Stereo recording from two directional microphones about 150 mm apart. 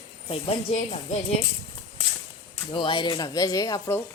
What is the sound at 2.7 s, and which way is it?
Speech, 35° left (ahead or behind).